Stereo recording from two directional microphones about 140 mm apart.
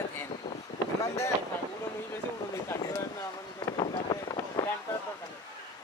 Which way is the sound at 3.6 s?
35° left (ahead or behind).